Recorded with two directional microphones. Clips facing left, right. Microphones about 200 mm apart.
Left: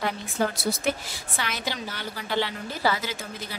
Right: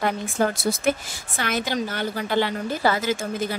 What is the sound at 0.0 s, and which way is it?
A woman's voice, 50° right (ahead or behind).